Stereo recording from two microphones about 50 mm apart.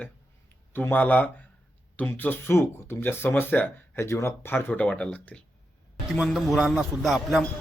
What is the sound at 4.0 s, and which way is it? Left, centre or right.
Speech, left.